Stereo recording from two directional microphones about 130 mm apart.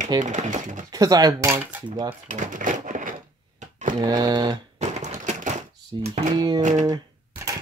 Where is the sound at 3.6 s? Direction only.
70° right (ahead or behind).